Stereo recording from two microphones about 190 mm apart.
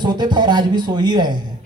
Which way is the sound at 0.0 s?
20° right (ahead or behind).